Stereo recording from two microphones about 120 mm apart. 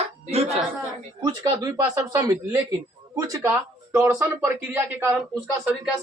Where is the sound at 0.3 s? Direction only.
60° right (ahead or behind).